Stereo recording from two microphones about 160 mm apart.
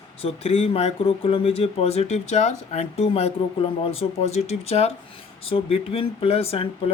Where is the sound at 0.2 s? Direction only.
40° left (ahead or behind).